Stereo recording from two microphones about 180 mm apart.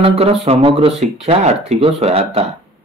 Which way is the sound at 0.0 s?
35° right (ahead or behind).